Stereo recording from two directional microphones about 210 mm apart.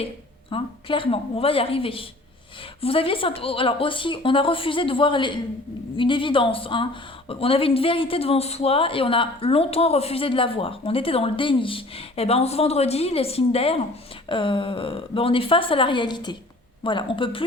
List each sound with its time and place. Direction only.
0.5 s speech: 25° left (ahead or behind)